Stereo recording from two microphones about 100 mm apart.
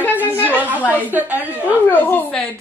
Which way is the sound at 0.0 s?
20° left (ahead or behind).